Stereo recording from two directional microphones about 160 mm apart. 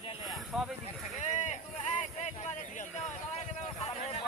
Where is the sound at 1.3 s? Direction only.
50° left (ahead or behind).